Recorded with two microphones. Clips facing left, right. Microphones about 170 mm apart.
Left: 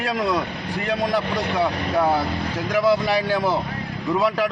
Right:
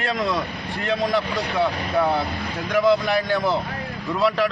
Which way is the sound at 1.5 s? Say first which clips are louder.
Right 1 dB; 10° left (ahead or behind).